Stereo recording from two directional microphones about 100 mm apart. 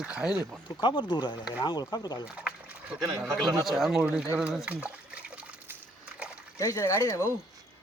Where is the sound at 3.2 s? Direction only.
5° left (ahead or behind).